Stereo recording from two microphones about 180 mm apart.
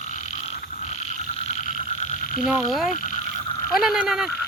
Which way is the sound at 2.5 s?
Centre (ahead or behind).